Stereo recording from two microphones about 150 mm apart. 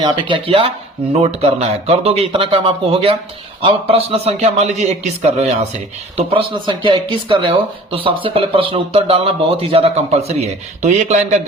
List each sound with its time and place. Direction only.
0.0 s a man's voice: 35° right (ahead or behind); by 4.7 s 50° right (ahead or behind)
6.1 s speech: 35° right (ahead or behind); by 11.3 s 50° right (ahead or behind)